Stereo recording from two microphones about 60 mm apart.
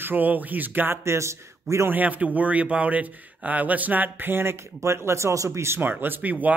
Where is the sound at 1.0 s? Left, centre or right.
Right.